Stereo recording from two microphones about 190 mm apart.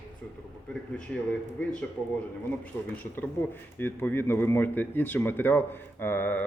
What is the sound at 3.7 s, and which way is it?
A man's voice, 10° left (ahead or behind).